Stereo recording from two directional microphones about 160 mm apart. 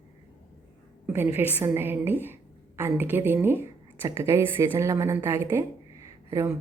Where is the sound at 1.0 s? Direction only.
15° right (ahead or behind).